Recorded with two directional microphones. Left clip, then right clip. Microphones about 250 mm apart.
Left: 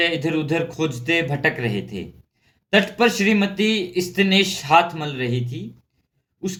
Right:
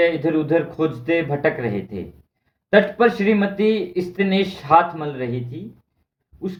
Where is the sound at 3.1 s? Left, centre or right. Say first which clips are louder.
Right 1 dB; centre.